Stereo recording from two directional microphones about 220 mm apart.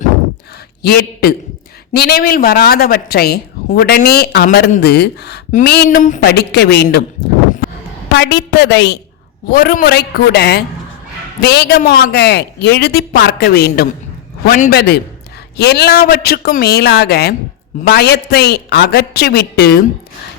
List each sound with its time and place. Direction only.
0.8 s speech: 45° left (ahead or behind)
8.1 s speech: 50° left (ahead or behind)